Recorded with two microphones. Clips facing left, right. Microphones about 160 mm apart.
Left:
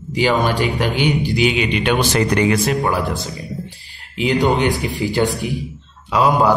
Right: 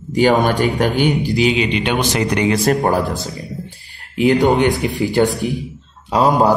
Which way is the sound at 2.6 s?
45° right (ahead or behind).